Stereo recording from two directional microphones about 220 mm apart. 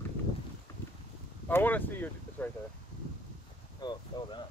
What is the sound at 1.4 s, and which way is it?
Speech, 10° left (ahead or behind).